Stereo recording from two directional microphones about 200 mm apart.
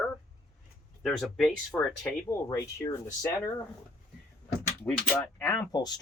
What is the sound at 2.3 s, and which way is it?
Speech, 15° left (ahead or behind).